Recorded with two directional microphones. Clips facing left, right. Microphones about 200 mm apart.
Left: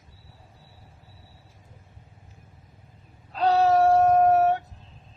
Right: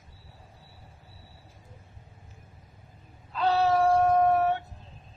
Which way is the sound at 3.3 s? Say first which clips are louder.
Left 4 dB; 40° left (ahead or behind).